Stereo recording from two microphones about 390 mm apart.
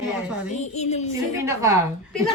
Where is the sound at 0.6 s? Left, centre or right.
Centre.